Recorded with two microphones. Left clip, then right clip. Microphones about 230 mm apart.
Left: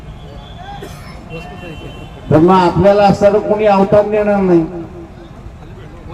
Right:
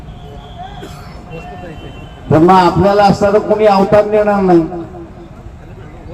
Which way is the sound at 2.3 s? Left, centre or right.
Right.